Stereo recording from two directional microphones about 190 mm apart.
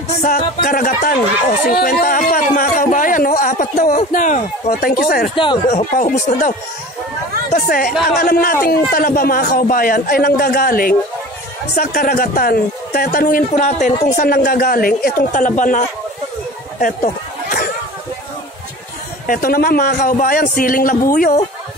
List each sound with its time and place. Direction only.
0.2 s speech: 45° left (ahead or behind)
5.3 s speech: 25° left (ahead or behind)
5.7 s speech: 40° left (ahead or behind)
7.5 s speech: 50° left (ahead or behind)
16.8 s a sound: 45° left (ahead or behind)
19.2 s speech: 50° left (ahead or behind)